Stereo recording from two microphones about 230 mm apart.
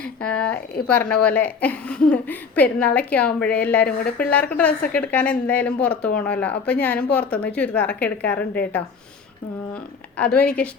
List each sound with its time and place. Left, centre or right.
0.0 s a woman's voice: centre
10.2 s speech: centre